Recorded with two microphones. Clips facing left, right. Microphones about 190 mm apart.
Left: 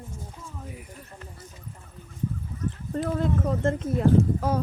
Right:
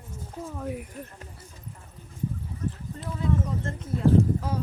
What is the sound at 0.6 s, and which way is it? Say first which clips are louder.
Speech: right 9 dB; 60° right (ahead or behind).